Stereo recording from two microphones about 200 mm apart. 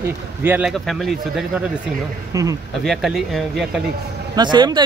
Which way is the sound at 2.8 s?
Centre (ahead or behind).